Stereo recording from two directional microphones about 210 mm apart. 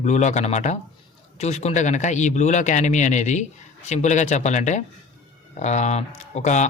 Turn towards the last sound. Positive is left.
turn(degrees=35)  # may be behind; listen again after turning